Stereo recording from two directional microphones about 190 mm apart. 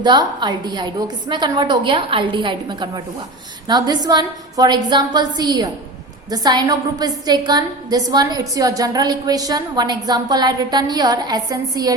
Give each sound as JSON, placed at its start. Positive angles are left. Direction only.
{"t": 0.0, "sound": "a woman's voice", "side_deg": -25}